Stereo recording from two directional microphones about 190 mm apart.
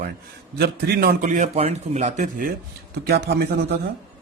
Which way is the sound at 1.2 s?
35° right (ahead or behind).